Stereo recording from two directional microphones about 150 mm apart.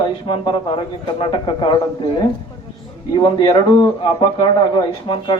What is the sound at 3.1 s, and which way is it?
A man's voice, 30° left (ahead or behind).